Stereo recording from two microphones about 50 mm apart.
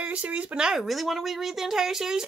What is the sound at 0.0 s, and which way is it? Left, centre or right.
Speech, right.